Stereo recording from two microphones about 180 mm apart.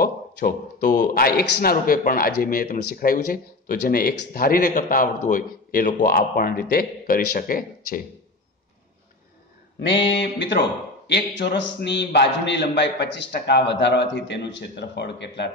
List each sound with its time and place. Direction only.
0.0 s a man's voice: 55° left (ahead or behind)
9.8 s a man's voice: 80° left